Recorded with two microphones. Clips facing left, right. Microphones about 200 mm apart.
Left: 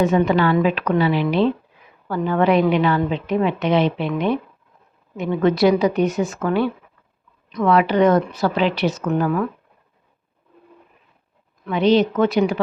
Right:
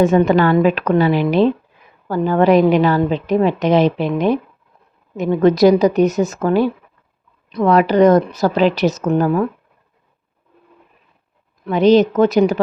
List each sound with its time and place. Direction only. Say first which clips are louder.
0.0 s a woman's voice: right 4 dB; 45° right (ahead or behind)
11.6 s a woman's voice: right 5 dB; 40° right (ahead or behind)